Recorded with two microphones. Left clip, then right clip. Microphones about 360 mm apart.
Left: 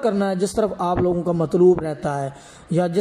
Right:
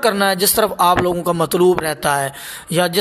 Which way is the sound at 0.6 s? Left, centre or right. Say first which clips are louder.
Right 9 dB; right.